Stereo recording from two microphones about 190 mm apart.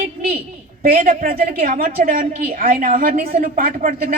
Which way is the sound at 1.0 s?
50° right (ahead or behind).